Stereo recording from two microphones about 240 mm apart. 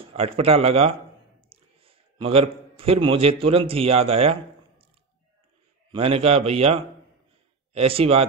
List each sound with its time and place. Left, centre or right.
0.0 s a man's voice: right
5.9 s speech: right